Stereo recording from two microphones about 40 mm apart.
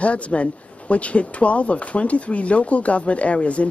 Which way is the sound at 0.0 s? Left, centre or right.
Left.